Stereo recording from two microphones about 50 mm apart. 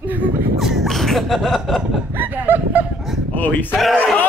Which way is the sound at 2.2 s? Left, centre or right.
Right.